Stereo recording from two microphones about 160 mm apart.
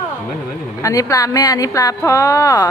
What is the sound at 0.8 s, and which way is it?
Speech, 20° left (ahead or behind).